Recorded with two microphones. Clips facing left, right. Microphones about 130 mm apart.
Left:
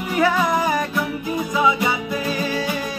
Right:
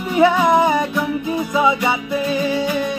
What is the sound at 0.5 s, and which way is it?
Music, 25° right (ahead or behind).